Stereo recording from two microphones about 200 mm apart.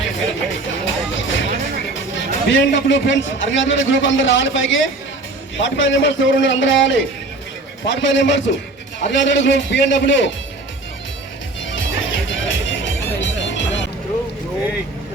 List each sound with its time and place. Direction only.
0.9 s music: 70° left (ahead or behind)
2.1 s a man's voice: 70° left (ahead or behind)
11.7 s music: 70° left (ahead or behind)